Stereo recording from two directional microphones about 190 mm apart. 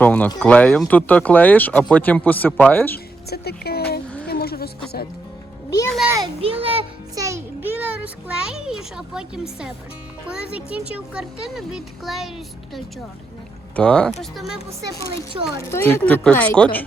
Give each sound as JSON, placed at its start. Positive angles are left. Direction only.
{"t": 0.0, "sound": "speech", "side_deg": 10}
{"t": 3.2, "sound": "a sound", "side_deg": 55}
{"t": 4.3, "sound": "music", "side_deg": 55}
{"t": 6.1, "sound": "a child's voice", "side_deg": -20}
{"t": 6.4, "sound": "a child's voice", "side_deg": -30}
{"t": 7.2, "sound": "a child's voice", "side_deg": -15}
{"t": 13.7, "sound": "speech", "side_deg": 5}
{"t": 15.6, "sound": "speech", "side_deg": 10}